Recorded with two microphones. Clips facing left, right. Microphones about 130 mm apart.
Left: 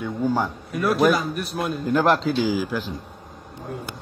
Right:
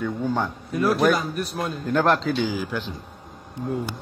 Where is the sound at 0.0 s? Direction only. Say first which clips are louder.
Left 2 dB; 5° left (ahead or behind).